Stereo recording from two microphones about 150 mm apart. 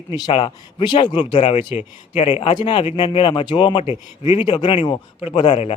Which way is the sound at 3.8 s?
45° left (ahead or behind).